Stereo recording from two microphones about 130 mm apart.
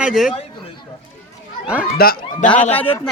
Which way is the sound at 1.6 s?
10° right (ahead or behind).